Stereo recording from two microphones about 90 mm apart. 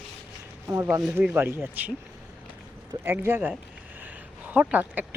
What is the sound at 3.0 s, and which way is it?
Speech, 25° right (ahead or behind).